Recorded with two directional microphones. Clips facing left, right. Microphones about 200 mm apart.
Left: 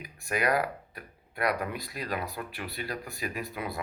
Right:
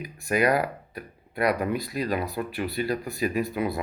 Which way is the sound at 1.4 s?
Centre (ahead or behind).